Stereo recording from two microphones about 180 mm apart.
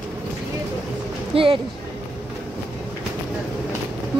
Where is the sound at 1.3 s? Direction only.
30° right (ahead or behind).